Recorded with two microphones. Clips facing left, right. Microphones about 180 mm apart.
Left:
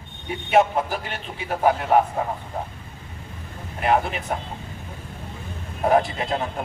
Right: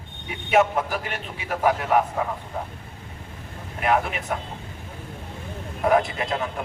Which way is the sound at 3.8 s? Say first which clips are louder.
Left 1 dB; 35° left (ahead or behind).